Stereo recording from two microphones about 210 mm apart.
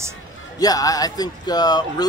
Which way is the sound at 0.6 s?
15° left (ahead or behind).